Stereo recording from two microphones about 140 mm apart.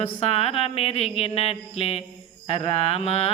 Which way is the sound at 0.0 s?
45° left (ahead or behind).